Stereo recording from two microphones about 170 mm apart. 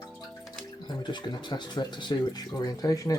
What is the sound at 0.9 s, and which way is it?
Speech, 25° left (ahead or behind).